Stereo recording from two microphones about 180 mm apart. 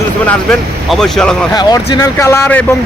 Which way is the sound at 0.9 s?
5° left (ahead or behind).